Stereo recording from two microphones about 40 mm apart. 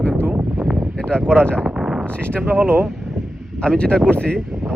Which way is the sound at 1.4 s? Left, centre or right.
Left.